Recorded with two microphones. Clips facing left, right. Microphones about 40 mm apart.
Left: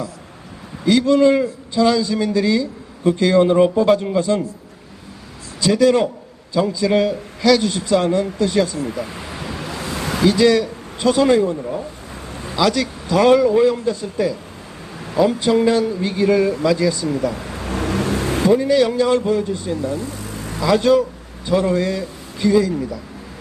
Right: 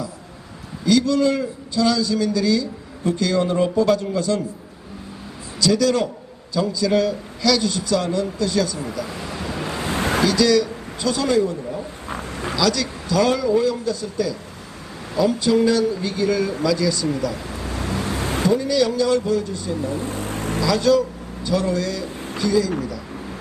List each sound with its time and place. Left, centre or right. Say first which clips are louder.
0.9 s a man's voice: left 4 dB; left
5.5 s a man's voice: left 4 dB; left
9.6 s waves: right 1 dB; right
9.8 s a sound: right 3 dB; right
10.2 s speech: left 5 dB; left
12.1 s a sound: right 7 dB; right
12.5 s a man's voice: left 4 dB; left
17.7 s vehicle: left 5 dB; left
18.5 s a man's voice: left 4 dB; left
20.0 s vehicle: right 2 dB; right
20.6 s a man's voice: left 3 dB; left